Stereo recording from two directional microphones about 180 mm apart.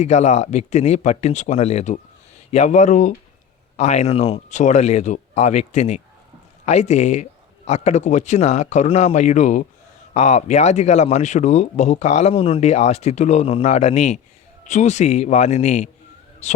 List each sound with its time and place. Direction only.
0.0 s speech: 40° left (ahead or behind)